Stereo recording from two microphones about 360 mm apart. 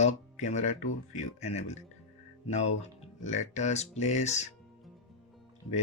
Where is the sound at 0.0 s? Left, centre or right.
Centre.